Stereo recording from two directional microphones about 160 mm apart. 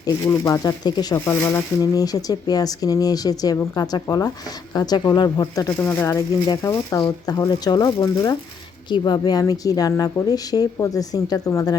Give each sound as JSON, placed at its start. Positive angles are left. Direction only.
{"t": 0.0, "sound": "speech", "side_deg": 20}
{"t": 5.8, "sound": "speech", "side_deg": 15}